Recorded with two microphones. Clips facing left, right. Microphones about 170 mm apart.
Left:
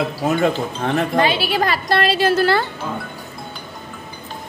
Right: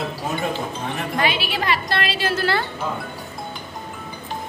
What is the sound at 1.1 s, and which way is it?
A woman's voice, 35° left (ahead or behind).